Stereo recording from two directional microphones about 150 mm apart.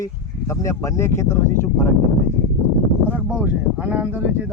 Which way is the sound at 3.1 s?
10° right (ahead or behind).